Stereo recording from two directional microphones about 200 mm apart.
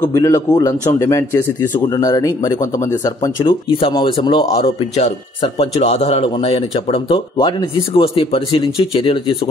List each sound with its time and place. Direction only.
0.0 s speech: 15° left (ahead or behind)